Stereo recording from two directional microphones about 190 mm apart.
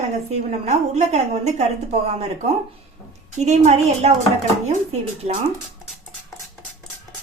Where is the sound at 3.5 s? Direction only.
35° right (ahead or behind).